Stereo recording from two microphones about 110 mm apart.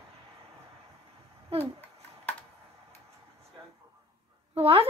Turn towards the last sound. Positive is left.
turn(degrees=-65)  # may be behind; listen again after turning